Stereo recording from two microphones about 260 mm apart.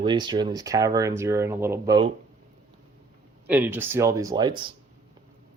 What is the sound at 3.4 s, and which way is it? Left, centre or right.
Speech, centre.